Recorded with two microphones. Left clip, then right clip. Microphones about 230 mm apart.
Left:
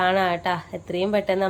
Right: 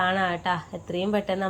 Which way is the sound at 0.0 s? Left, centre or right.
Centre.